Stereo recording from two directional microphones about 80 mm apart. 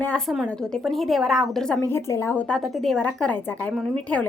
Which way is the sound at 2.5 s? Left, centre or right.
Centre.